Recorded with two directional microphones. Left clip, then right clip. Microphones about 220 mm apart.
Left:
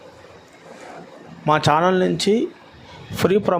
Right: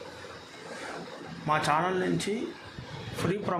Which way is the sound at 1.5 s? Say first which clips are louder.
Left 10 dB; 40° left (ahead or behind).